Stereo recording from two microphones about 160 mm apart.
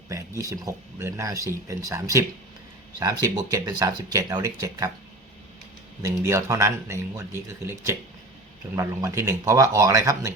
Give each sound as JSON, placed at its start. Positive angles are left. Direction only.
{"t": 0.1, "sound": "speech", "side_deg": -20}
{"t": 6.0, "sound": "speech", "side_deg": -15}